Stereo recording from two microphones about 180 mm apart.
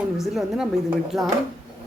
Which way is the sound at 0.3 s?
Centre (ahead or behind).